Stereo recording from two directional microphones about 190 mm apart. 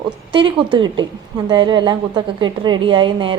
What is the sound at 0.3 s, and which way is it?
A woman's voice, 25° right (ahead or behind).